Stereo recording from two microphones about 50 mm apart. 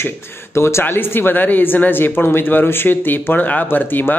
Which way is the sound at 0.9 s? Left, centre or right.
Left.